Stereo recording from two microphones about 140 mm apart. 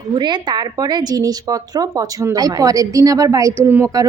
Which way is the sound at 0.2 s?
30° right (ahead or behind).